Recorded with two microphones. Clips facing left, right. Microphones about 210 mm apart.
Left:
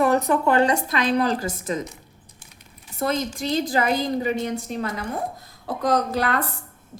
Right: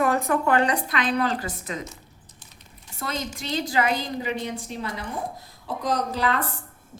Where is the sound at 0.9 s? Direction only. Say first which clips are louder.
Left 3 dB; 40° left (ahead or behind).